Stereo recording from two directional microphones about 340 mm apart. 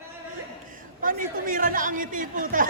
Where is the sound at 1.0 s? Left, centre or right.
Right.